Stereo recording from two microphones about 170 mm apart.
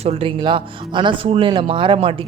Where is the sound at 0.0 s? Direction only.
35° right (ahead or behind).